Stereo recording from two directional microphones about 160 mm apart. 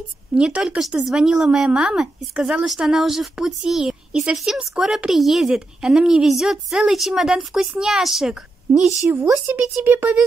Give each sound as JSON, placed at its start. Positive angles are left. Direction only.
{"t": 0.3, "sound": "speech", "side_deg": -5}